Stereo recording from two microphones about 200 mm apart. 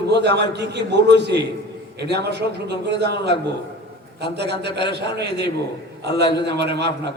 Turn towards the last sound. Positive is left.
turn(degrees=-55)  # may be behind; listen again after turning